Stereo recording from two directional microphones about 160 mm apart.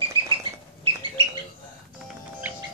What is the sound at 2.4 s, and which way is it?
Music, 10° right (ahead or behind).